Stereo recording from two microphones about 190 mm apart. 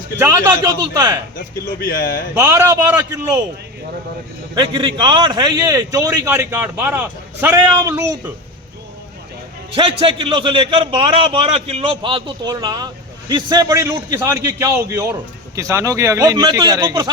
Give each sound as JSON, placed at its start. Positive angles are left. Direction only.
{"t": 0.2, "sound": "a man's voice", "side_deg": -15}
{"t": 1.4, "sound": "speech", "side_deg": 45}
{"t": 2.3, "sound": "a man's voice", "side_deg": -15}
{"t": 4.5, "sound": "a man's voice", "side_deg": -25}
{"t": 9.7, "sound": "a man's voice", "side_deg": -25}